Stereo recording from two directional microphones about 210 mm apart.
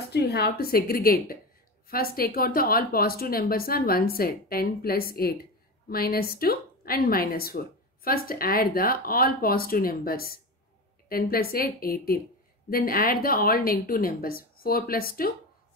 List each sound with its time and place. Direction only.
0.1 s speech: 50° left (ahead or behind)